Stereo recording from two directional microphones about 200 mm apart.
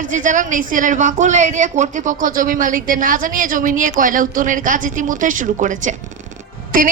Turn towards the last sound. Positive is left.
turn(degrees=-45)  # may be behind; listen again after turning